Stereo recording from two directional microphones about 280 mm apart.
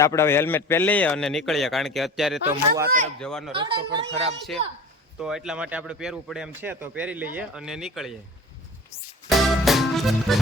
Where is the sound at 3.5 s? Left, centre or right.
Centre.